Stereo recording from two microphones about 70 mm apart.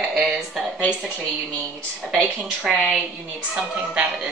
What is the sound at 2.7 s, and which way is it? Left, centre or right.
Speech, centre.